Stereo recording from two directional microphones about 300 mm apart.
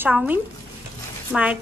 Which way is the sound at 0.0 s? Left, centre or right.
Centre.